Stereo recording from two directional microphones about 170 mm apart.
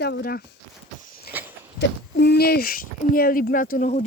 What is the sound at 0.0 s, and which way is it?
Speech, 70° left (ahead or behind).